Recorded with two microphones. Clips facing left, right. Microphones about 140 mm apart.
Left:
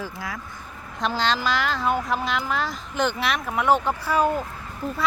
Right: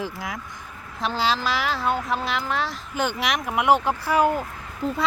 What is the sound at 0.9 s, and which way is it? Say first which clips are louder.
A woman's voice: even; 5° right (ahead or behind).